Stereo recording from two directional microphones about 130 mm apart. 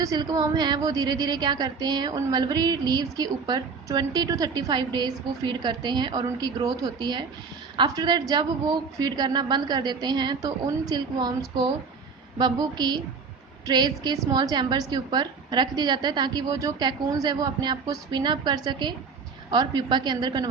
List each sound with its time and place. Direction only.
0.0 s a woman's voice: 30° right (ahead or behind)